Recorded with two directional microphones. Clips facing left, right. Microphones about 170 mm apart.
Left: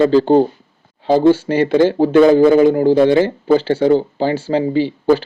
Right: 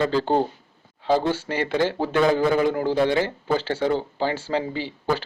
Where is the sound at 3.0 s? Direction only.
25° left (ahead or behind).